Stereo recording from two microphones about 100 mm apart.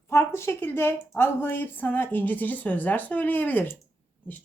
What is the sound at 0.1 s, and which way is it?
Speech, 25° left (ahead or behind).